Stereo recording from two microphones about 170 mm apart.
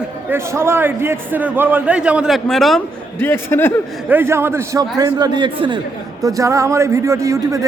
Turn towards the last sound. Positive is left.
turn(degrees=-20)  # may be behind; listen again after turning